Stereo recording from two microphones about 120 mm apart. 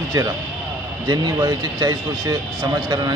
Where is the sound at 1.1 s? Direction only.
30° right (ahead or behind).